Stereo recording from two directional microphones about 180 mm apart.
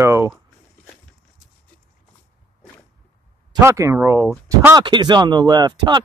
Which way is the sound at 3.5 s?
15° right (ahead or behind).